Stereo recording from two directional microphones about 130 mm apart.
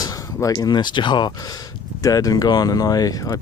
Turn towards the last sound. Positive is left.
turn(degrees=25)  # may be behind; listen again after turning